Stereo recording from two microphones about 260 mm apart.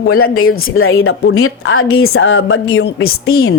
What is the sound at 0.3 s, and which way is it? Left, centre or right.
A woman's voice, left.